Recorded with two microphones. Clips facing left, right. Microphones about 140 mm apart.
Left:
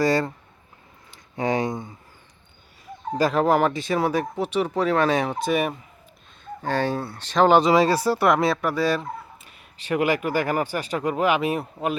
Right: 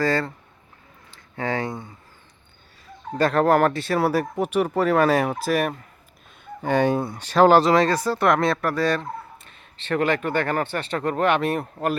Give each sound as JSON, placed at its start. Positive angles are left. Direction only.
{"t": 0.0, "sound": "speech", "side_deg": 15}
{"t": 3.2, "sound": "speech", "side_deg": 5}
{"t": 6.4, "sound": "speech", "side_deg": -10}